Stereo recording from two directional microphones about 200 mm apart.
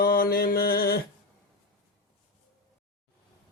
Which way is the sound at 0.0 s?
50° left (ahead or behind).